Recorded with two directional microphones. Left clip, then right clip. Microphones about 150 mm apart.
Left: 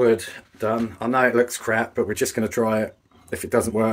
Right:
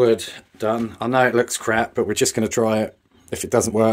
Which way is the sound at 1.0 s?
65° right (ahead or behind).